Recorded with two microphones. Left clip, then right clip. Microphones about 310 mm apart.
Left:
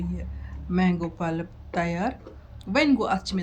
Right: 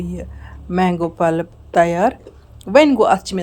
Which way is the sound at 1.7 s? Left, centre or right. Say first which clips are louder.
Right 14 dB; centre.